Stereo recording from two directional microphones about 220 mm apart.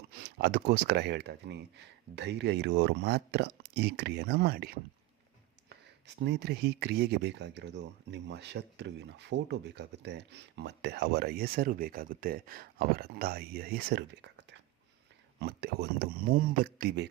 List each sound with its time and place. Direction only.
0.1 s speech: 45° right (ahead or behind)
6.2 s speech: 50° right (ahead or behind)